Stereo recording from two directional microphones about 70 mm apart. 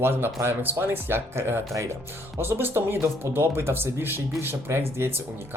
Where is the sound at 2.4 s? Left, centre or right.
Right.